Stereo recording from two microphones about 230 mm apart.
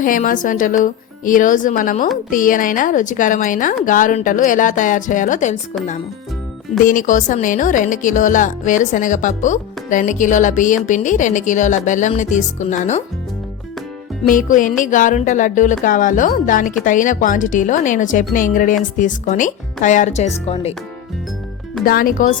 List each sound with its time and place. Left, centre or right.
0.0 s speech: left
6.8 s speech: left
14.3 s speech: left
21.8 s speech: left